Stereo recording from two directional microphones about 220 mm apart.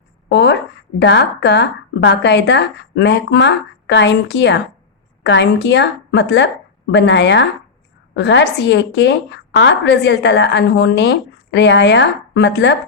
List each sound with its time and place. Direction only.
0.3 s speech: 50° left (ahead or behind)